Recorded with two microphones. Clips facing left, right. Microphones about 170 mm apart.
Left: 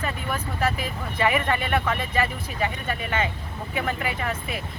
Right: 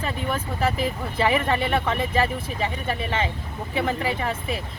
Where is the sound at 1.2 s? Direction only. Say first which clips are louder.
Right 2 dB; 30° right (ahead or behind).